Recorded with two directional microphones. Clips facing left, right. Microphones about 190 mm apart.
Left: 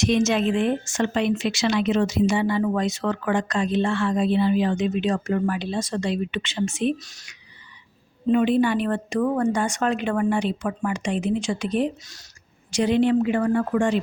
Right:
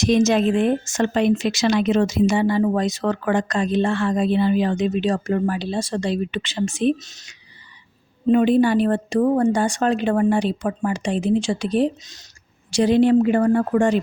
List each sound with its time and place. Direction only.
0.0 s a woman's voice: 40° right (ahead or behind)
7.0 s speech: 20° right (ahead or behind)
8.3 s a woman's voice: 40° right (ahead or behind)